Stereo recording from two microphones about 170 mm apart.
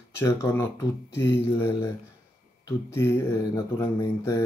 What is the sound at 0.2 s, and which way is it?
Mantra, 15° left (ahead or behind).